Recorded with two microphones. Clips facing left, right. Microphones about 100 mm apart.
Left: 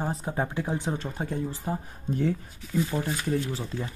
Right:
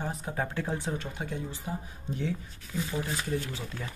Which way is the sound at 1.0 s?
40° left (ahead or behind).